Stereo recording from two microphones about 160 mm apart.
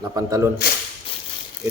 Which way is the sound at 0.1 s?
20° right (ahead or behind).